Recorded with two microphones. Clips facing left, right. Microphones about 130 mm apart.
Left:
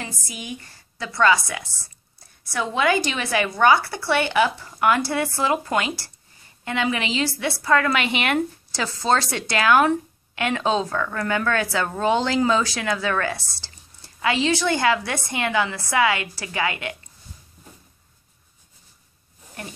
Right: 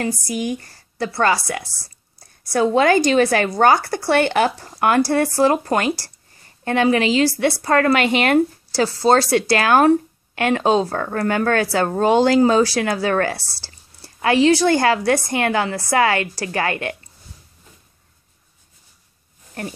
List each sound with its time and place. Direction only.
0.3 s a woman's voice: 40° right (ahead or behind)